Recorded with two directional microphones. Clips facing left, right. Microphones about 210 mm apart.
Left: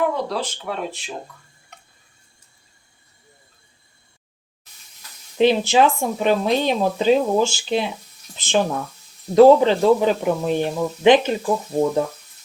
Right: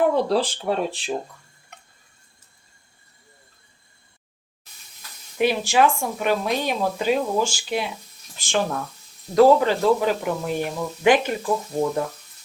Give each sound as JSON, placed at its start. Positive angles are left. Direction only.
{"t": 0.1, "sound": "speech", "side_deg": -30}
{"t": 5.4, "sound": "speech", "side_deg": 25}